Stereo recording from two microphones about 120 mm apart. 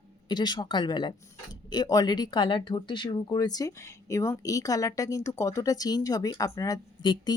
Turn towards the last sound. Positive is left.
turn(degrees=40)  # may be behind; listen again after turning